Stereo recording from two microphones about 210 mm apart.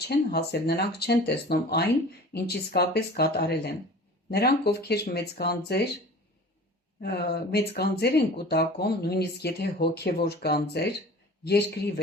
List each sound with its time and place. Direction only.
0.0 s speech: 50° left (ahead or behind)
7.0 s speech: 50° left (ahead or behind)